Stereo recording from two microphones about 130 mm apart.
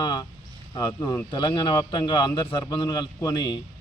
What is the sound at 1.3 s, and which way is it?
A man's voice, 35° left (ahead or behind).